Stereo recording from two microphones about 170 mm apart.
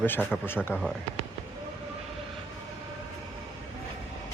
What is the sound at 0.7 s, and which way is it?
Speech, 15° left (ahead or behind).